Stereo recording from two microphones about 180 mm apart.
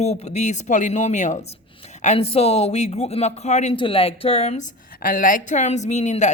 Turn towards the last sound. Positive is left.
turn(degrees=40)  # may be behind; listen again after turning